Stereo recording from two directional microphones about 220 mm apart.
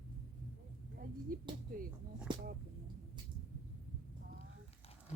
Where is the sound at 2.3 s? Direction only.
20° right (ahead or behind).